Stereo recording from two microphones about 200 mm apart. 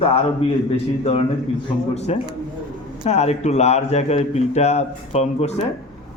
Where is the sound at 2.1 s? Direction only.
30° left (ahead or behind).